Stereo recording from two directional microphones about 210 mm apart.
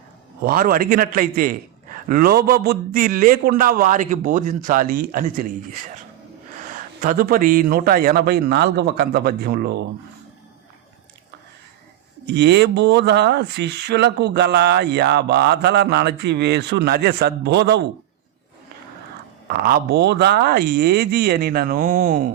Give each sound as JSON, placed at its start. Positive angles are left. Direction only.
{"t": 0.4, "sound": "a man's voice", "side_deg": -40}
{"t": 6.6, "sound": "speech", "side_deg": -40}
{"t": 12.2, "sound": "speech", "side_deg": -50}
{"t": 19.5, "sound": "speech", "side_deg": -45}